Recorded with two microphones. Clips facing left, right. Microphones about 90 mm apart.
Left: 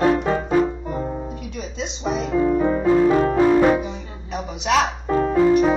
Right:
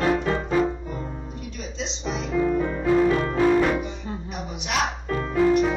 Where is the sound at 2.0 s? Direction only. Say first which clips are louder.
Left 7 dB; 50° left (ahead or behind).